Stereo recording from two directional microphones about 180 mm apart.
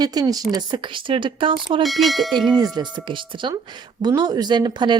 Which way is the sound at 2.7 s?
25° right (ahead or behind).